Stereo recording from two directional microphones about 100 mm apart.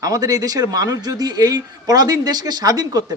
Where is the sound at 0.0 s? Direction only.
35° right (ahead or behind).